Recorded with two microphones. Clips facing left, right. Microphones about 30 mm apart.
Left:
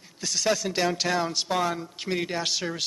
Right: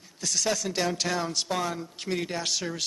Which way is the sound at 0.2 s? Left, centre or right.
Centre.